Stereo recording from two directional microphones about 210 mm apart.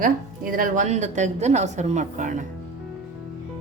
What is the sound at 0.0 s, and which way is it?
A woman's voice, 40° right (ahead or behind).